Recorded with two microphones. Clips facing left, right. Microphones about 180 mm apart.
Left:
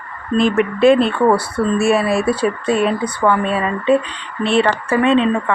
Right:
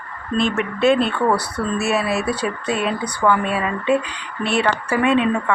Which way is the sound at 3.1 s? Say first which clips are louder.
Left 2 dB; 25° left (ahead or behind).